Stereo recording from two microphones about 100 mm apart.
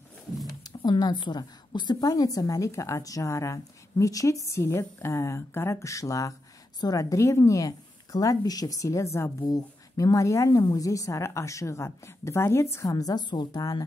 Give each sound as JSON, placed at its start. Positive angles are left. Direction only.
{"t": 0.7, "sound": "a woman's voice", "side_deg": 45}
{"t": 9.4, "sound": "a woman's voice", "side_deg": 40}